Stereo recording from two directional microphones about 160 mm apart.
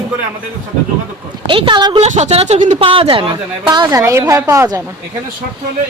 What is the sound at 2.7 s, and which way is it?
A woman's voice, 35° right (ahead or behind).